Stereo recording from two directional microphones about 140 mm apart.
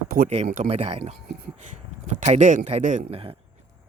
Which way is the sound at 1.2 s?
90° right.